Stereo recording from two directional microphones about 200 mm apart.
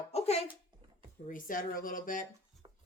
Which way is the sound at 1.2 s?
40° left (ahead or behind).